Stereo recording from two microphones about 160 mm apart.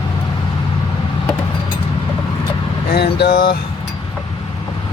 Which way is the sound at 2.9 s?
85° left.